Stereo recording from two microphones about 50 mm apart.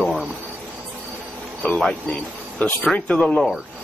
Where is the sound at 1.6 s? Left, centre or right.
Left.